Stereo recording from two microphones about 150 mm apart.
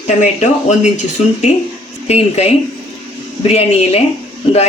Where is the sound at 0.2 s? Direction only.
50° left (ahead or behind).